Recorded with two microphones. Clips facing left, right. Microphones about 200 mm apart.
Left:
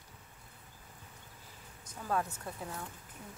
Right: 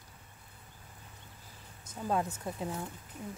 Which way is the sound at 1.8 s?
20° right (ahead or behind).